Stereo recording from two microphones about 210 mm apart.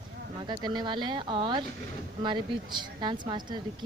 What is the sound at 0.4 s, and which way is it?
Speech, 20° right (ahead or behind).